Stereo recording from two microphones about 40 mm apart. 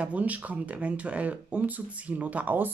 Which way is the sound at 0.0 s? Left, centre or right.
Right.